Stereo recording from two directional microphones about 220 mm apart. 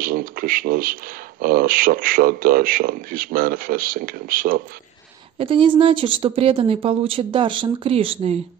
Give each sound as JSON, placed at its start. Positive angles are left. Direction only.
{"t": 0.0, "sound": "speech", "side_deg": -40}
{"t": 5.4, "sound": "speech", "side_deg": -25}